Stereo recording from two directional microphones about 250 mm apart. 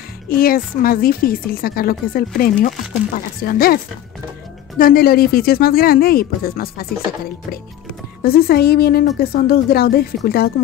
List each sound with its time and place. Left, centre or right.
0.3 s speech: left
8.2 s speech: left